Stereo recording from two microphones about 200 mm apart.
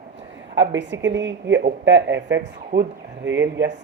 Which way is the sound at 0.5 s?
65° right (ahead or behind).